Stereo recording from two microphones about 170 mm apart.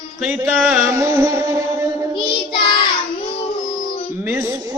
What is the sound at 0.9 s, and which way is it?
Music, 15° right (ahead or behind).